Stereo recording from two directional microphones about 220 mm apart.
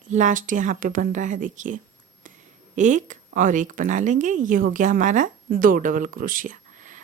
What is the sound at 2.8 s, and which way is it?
Speech, 35° right (ahead or behind).